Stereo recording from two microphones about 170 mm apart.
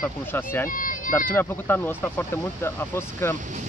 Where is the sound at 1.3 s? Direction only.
10° left (ahead or behind).